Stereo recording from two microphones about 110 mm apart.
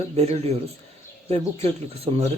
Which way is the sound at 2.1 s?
55° right (ahead or behind).